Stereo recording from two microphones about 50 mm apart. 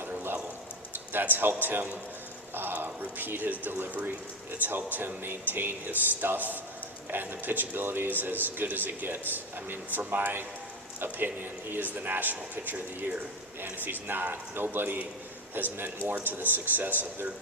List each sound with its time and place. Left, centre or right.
0.0 s a sound: right
1.1 s a man's voice: right
11.9 s a man's voice: right